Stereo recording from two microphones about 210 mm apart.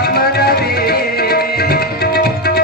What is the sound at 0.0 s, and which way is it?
Tabla, 50° left (ahead or behind).